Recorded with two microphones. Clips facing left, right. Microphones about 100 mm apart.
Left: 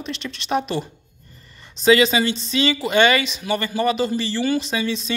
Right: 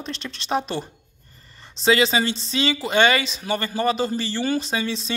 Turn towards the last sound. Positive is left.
turn(degrees=-30)  # may be behind; listen again after turning